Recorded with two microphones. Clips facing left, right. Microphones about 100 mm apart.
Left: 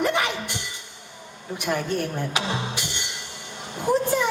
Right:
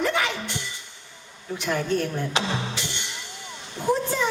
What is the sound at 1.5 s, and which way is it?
Speech, 15° left (ahead or behind).